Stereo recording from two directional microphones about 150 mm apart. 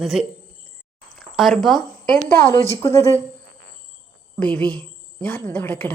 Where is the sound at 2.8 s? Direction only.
20° left (ahead or behind).